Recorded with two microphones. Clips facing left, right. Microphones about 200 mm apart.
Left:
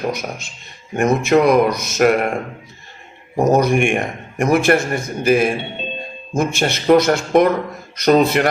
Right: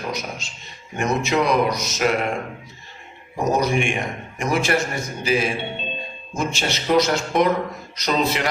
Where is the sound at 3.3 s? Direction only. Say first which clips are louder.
Left 6 dB; 55° left (ahead or behind).